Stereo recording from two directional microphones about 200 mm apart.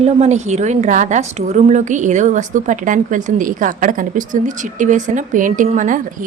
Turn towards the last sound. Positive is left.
turn(degrees=-40)  # may be behind; listen again after turning